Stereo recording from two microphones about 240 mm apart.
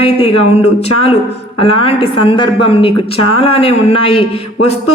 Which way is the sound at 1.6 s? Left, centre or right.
Left.